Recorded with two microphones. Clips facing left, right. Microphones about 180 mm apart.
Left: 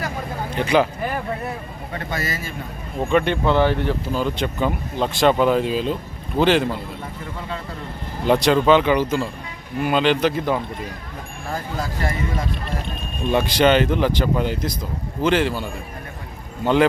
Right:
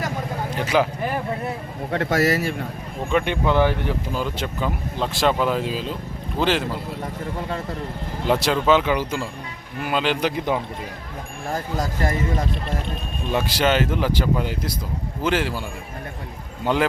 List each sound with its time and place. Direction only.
0.5 s speech: 5° right (ahead or behind)
1.9 s a man's voice: 75° right (ahead or behind)
3.1 s speech: 10° right (ahead or behind)
8.3 s speech: 5° right (ahead or behind)
11.8 s speech: 40° right (ahead or behind)
13.3 s speech: 5° right (ahead or behind)
16.6 s speech: 15° right (ahead or behind)